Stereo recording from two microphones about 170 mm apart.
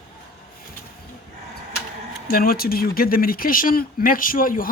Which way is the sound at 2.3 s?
60° left (ahead or behind).